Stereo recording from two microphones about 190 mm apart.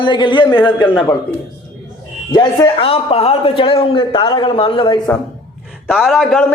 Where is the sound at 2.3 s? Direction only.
25° left (ahead or behind).